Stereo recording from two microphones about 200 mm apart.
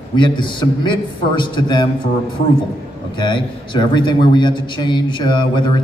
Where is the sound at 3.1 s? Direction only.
25° left (ahead or behind).